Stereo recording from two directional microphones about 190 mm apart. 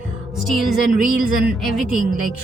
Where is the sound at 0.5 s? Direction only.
Centre (ahead or behind).